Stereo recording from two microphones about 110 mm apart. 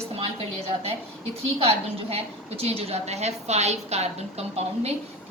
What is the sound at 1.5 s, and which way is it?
A woman's voice, 60° right (ahead or behind).